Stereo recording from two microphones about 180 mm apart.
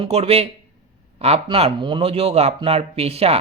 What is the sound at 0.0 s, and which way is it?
Speech, 35° right (ahead or behind).